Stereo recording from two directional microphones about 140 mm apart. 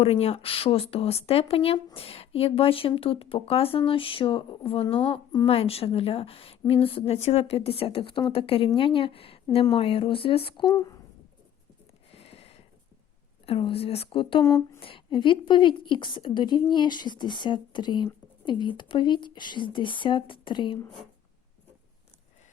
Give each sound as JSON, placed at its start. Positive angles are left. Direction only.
{"t": 0.0, "sound": "a woman's voice", "side_deg": 45}
{"t": 10.7, "sound": "speech", "side_deg": 25}
{"t": 12.1, "sound": "a sound", "side_deg": 45}
{"t": 13.4, "sound": "a woman's voice", "side_deg": 40}
{"t": 14.4, "sound": "speech", "side_deg": 20}
{"t": 14.8, "sound": "a woman's voice", "side_deg": 40}